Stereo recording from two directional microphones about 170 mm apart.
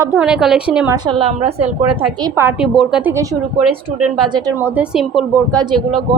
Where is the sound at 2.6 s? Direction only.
5° right (ahead or behind).